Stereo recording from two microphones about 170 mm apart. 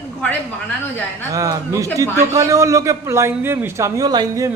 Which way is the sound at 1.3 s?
20° right (ahead or behind).